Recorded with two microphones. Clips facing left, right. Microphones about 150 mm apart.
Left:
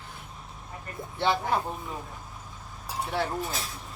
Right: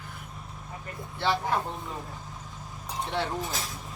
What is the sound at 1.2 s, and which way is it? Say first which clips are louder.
Speech: left 1 dB; 20° left (ahead or behind).